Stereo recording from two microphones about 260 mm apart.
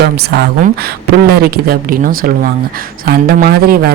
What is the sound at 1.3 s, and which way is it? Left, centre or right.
Speech, right.